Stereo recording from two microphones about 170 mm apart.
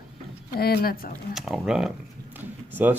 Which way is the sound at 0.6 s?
65° left (ahead or behind).